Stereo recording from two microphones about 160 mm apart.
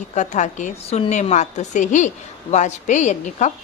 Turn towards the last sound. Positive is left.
turn(degrees=45)  # may be behind; listen again after turning